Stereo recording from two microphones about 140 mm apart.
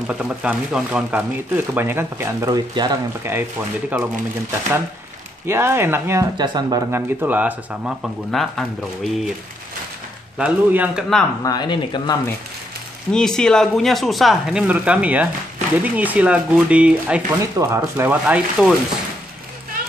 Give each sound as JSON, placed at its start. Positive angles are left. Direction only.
{"t": 0.0, "sound": "speech", "side_deg": -10}
{"t": 2.5, "sound": "speech", "side_deg": -30}
{"t": 3.3, "sound": "speech", "side_deg": -15}
{"t": 6.3, "sound": "speech", "side_deg": -30}
{"t": 6.9, "sound": "speech", "side_deg": -15}
{"t": 10.3, "sound": "speech", "side_deg": -10}
{"t": 11.4, "sound": "speech", "side_deg": 30}
{"t": 13.1, "sound": "speech", "side_deg": 5}
{"t": 17.4, "sound": "speech", "side_deg": -20}